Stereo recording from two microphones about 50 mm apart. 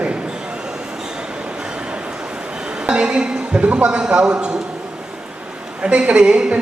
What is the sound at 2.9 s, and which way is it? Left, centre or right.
A man's voice, right.